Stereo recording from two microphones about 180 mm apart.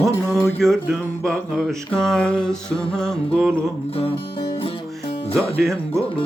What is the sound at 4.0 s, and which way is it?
Music, 30° left (ahead or behind).